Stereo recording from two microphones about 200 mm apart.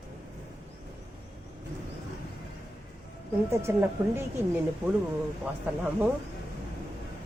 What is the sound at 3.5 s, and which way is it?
Speech, 15° right (ahead or behind).